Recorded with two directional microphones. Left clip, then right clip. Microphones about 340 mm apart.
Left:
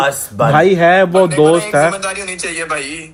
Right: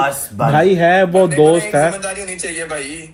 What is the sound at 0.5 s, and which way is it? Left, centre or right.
Speech, centre.